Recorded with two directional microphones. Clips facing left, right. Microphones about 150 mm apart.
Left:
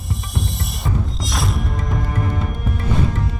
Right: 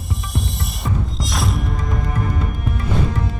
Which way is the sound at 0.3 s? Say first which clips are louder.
Even; centre (ahead or behind).